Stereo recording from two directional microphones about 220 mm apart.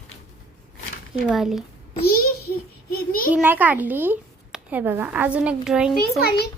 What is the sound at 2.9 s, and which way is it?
Speech, 40° left (ahead or behind).